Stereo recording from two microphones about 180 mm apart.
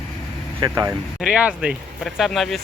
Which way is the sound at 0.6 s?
20° right (ahead or behind).